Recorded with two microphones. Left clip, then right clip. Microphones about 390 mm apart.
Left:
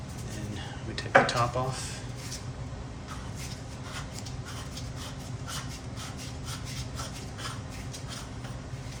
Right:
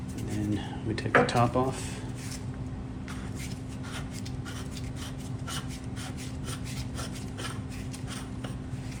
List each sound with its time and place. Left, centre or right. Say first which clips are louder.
0.9 s speech: left 1 dB; centre